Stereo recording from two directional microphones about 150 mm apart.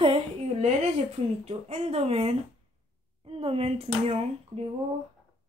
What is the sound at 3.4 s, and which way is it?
Speech, 40° right (ahead or behind).